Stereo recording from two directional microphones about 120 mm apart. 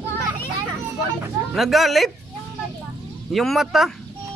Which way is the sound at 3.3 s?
Centre (ahead or behind).